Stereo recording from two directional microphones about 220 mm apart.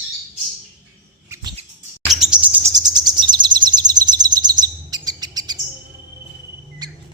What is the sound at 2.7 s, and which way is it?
Chirp, 20° right (ahead or behind).